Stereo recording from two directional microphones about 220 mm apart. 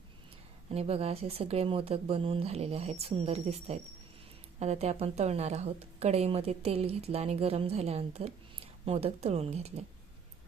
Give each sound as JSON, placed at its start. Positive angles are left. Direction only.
{"t": 0.7, "sound": "speech", "side_deg": -25}